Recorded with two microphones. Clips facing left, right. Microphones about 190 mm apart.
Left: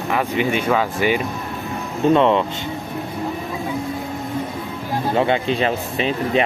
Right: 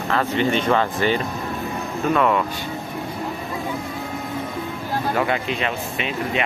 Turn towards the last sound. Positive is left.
turn(degrees=35)  # may be behind; listen again after turning